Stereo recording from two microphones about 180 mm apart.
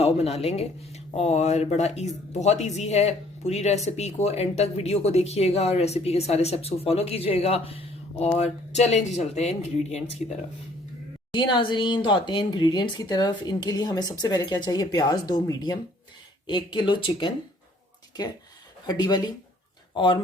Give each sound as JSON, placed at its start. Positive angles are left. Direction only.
{"t": 0.0, "sound": "speech", "side_deg": 35}
{"t": 11.3, "sound": "speech", "side_deg": 25}
{"t": 18.9, "sound": "speech", "side_deg": 20}